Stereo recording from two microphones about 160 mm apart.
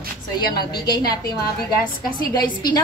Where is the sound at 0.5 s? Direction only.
25° left (ahead or behind).